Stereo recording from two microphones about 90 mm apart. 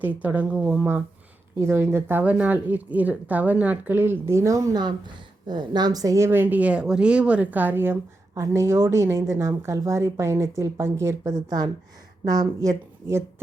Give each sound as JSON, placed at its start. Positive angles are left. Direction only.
{"t": 0.0, "sound": "speech", "side_deg": -20}
{"t": 0.8, "sound": "a woman's voice", "side_deg": -25}
{"t": 4.7, "sound": "a woman's voice", "side_deg": -55}